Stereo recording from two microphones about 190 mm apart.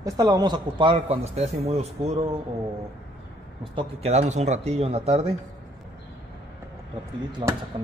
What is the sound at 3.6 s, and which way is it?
Speech, 30° right (ahead or behind).